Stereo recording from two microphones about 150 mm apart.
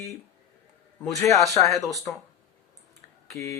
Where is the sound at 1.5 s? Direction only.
20° left (ahead or behind).